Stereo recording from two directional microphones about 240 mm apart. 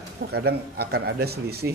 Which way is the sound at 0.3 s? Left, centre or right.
Right.